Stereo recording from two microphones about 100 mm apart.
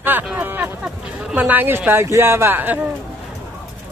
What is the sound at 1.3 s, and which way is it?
Speech, 15° right (ahead or behind).